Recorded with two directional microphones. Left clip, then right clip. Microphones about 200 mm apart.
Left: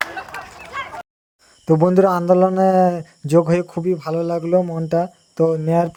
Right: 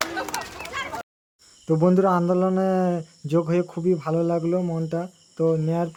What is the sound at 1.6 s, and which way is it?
Speech, 25° left (ahead or behind).